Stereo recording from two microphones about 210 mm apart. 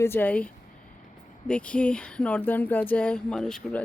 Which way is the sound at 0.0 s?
10° left (ahead or behind).